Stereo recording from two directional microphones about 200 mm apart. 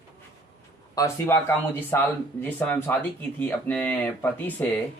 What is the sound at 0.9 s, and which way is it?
Speech, 15° left (ahead or behind).